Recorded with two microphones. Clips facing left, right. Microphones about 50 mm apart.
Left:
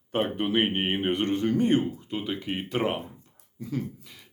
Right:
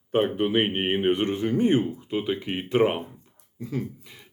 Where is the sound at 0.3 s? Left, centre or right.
Centre.